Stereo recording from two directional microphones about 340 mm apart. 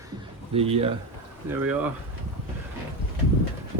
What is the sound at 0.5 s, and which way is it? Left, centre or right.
Speech, centre.